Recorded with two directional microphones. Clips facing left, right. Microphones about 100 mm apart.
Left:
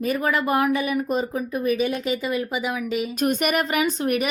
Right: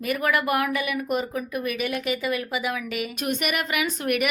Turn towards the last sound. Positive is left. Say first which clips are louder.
# left 3 dB
turn(degrees=30)  # may be behind; listen again after turning